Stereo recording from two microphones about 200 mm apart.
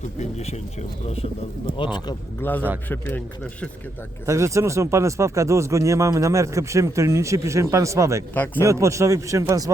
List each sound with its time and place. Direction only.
0.2 s speech: 35° left (ahead or behind)
2.4 s a man's voice: 10° left (ahead or behind)
4.3 s speech: 15° right (ahead or behind)
8.3 s a man's voice: 10° left (ahead or behind)
8.6 s speech: 15° right (ahead or behind)